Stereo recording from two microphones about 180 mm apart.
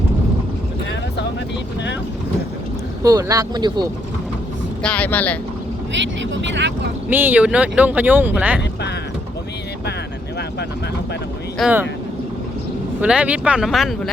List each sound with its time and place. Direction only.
3.0 s speech: 20° right (ahead or behind)
4.8 s speech: 5° left (ahead or behind)
5.9 s speech: 90° right
7.1 s speech: 10° right (ahead or behind)
11.6 s speech: centre (ahead or behind)
13.0 s speech: 5° right (ahead or behind)